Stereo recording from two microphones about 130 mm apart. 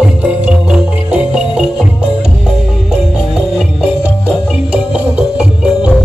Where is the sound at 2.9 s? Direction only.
5° right (ahead or behind).